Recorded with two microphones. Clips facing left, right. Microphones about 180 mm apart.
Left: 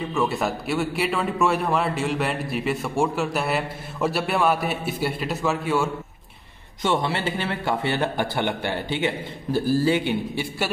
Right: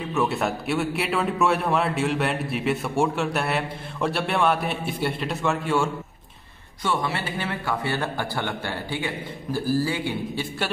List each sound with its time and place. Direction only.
0.1 s a man's voice: centre (ahead or behind)
6.8 s a man's voice: 25° left (ahead or behind)